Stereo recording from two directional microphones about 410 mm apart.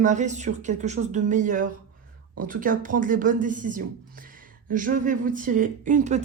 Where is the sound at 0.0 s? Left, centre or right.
Centre.